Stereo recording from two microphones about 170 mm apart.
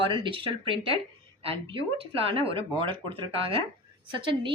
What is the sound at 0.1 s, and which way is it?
A woman's voice, 30° right (ahead or behind).